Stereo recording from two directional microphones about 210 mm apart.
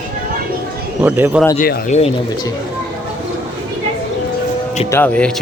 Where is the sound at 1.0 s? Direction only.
10° right (ahead or behind).